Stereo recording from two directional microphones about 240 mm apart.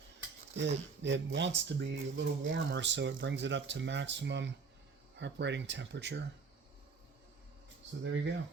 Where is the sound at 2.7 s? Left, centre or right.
Right.